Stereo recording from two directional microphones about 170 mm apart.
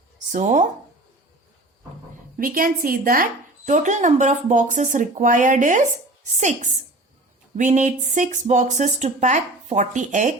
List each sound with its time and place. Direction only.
0.3 s speech: 45° right (ahead or behind)
2.4 s a woman's voice: 55° right (ahead or behind)
3.7 s speech: 45° right (ahead or behind)